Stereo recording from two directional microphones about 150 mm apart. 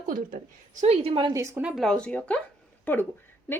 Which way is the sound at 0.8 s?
40° right (ahead or behind).